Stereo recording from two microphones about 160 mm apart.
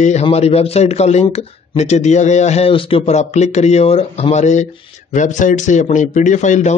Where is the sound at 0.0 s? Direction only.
40° left (ahead or behind).